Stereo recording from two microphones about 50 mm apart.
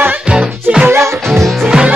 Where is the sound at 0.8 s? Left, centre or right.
Right.